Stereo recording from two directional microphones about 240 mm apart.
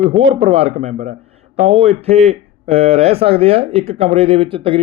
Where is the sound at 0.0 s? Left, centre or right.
Right.